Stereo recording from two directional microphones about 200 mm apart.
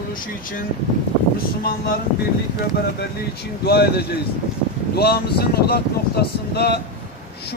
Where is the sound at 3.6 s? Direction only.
55° left (ahead or behind).